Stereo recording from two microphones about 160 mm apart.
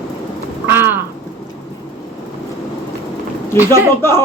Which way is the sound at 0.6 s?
15° right (ahead or behind).